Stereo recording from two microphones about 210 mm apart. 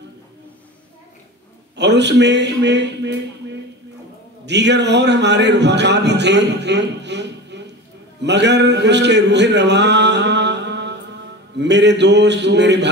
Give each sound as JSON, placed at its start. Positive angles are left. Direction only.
{"t": 1.8, "sound": "speech", "side_deg": -55}